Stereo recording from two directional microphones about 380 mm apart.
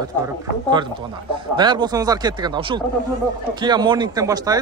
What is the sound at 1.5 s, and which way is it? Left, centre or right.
Speech, centre.